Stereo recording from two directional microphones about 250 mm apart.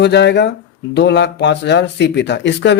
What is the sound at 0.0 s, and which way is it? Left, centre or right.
Speech, left.